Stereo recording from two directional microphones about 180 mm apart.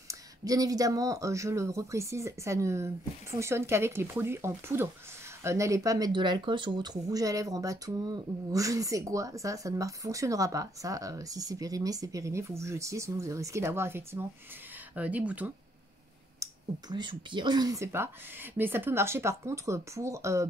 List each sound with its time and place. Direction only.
0.1 s speech: 20° right (ahead or behind)
16.9 s speech: 25° right (ahead or behind)